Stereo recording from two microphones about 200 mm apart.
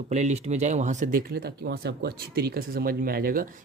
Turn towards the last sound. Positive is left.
turn(degrees=-45)  # may be behind; listen again after turning